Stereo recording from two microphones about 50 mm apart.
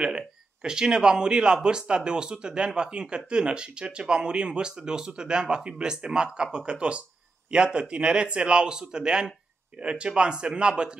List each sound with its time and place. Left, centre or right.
0.6 s speech: centre